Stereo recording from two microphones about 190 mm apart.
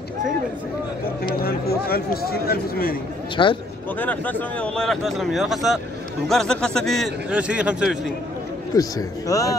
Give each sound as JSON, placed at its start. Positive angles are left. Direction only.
{"t": 1.4, "sound": "speech", "side_deg": 50}
{"t": 3.4, "sound": "speech", "side_deg": 25}
{"t": 4.0, "sound": "speech", "side_deg": 10}
{"t": 8.7, "sound": "speech", "side_deg": 20}